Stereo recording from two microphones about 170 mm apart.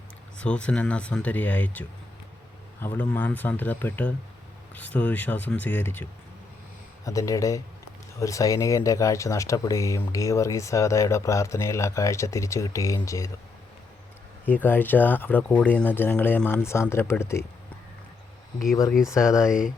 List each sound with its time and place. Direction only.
0.3 s speech: 5° left (ahead or behind)
2.8 s speech: 10° left (ahead or behind)
14.4 s speech: 10° left (ahead or behind)
19.0 s speech: 20° left (ahead or behind)